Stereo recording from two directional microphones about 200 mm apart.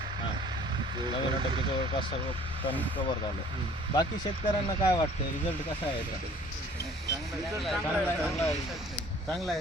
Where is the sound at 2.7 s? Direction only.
10° left (ahead or behind).